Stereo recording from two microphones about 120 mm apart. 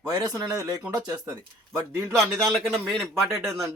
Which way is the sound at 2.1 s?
Centre (ahead or behind).